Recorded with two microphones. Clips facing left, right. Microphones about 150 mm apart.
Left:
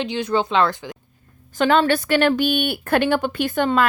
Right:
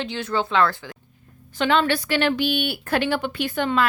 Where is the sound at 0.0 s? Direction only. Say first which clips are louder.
Left 4 dB; 15° left (ahead or behind).